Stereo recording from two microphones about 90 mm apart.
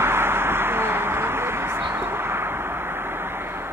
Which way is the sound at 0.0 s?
25° right (ahead or behind).